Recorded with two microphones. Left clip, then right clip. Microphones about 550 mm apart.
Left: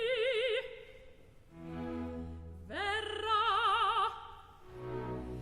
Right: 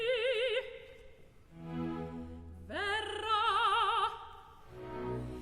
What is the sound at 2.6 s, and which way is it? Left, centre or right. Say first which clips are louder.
Music: even; right.